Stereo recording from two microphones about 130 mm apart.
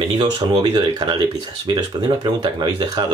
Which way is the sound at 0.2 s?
30° right (ahead or behind).